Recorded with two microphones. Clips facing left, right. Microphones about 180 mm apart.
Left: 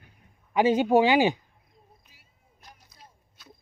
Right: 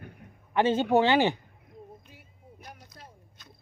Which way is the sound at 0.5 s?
10° left (ahead or behind).